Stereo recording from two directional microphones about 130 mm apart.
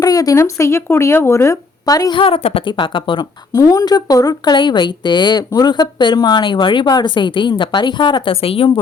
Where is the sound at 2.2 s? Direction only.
45° left (ahead or behind).